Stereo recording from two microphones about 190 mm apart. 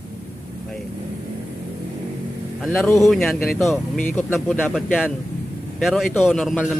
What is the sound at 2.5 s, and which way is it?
A man's voice, centre (ahead or behind).